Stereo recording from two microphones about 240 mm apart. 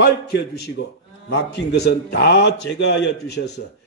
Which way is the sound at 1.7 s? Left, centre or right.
Left.